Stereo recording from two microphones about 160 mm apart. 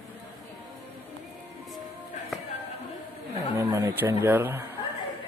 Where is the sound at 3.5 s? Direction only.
15° right (ahead or behind).